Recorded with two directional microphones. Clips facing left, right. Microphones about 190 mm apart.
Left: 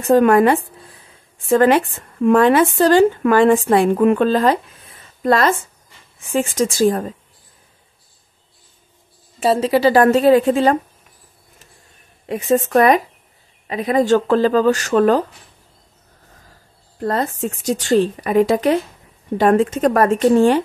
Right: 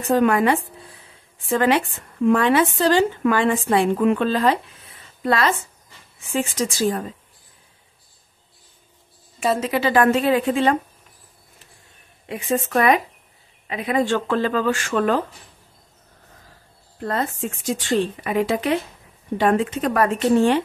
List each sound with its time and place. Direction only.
0.1 s speech: 50° left (ahead or behind)
9.4 s speech: 30° left (ahead or behind)
12.3 s speech: 40° left (ahead or behind)
17.0 s speech: 40° left (ahead or behind)